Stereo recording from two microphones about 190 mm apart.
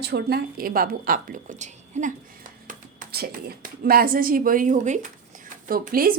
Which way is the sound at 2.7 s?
50° right (ahead or behind).